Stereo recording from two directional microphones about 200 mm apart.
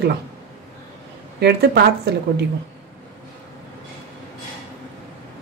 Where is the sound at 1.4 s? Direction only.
55° right (ahead or behind).